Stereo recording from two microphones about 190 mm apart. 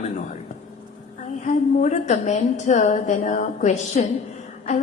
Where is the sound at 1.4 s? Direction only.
40° left (ahead or behind).